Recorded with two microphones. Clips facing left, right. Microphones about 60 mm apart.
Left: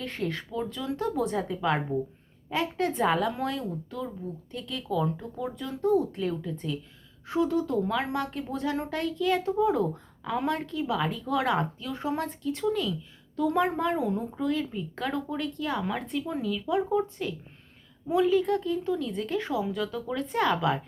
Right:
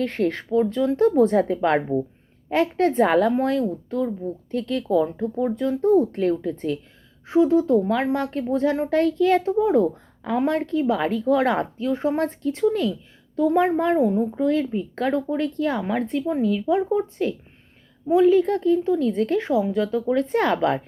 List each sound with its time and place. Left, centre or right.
0.0 s a woman's voice: right
4.5 s a woman's voice: right
4.9 s speech: right
7.3 s a woman's voice: right
12.9 s a woman's voice: right
19.4 s speech: right